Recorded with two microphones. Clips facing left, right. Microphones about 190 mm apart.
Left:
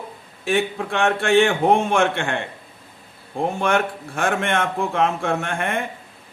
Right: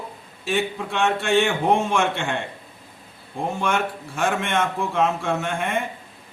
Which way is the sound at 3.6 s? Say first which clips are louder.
Left 3 dB; 55° left (ahead or behind).